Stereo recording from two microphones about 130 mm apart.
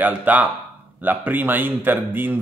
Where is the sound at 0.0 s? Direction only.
10° right (ahead or behind).